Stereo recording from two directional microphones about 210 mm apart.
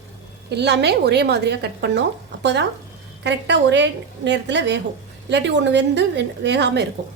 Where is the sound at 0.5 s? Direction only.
50° right (ahead or behind).